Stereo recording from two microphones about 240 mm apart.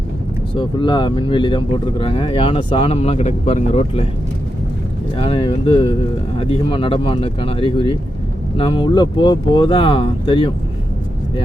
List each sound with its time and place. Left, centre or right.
0.5 s speech: centre
5.1 s speech: left